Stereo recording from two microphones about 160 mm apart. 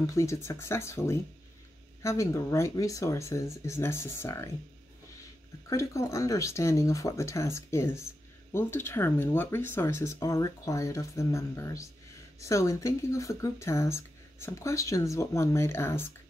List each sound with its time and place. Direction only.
0.0 s speech: 20° left (ahead or behind)
5.7 s speech: 20° left (ahead or behind)